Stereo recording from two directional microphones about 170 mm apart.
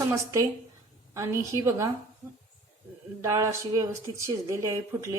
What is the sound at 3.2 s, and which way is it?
Speech, 15° right (ahead or behind).